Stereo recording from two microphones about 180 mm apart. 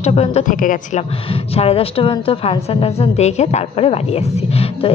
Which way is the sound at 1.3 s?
35° left (ahead or behind).